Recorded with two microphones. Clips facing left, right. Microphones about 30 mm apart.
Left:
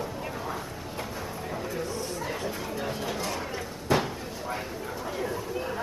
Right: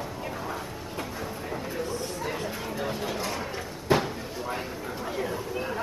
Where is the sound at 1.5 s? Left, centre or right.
Centre.